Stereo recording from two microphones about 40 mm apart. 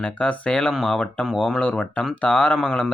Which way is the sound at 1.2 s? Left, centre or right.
Centre.